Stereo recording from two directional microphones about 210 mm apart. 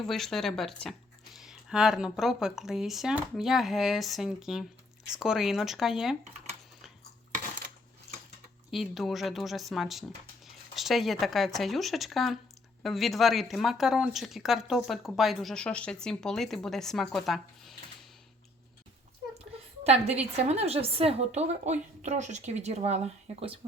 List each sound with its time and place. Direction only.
0.0 s speech: centre (ahead or behind)
8.7 s speech: centre (ahead or behind)
19.8 s a woman's voice: 30° right (ahead or behind)